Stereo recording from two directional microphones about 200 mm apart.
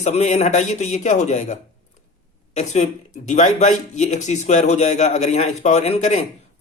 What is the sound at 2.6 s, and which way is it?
Speech, 35° left (ahead or behind).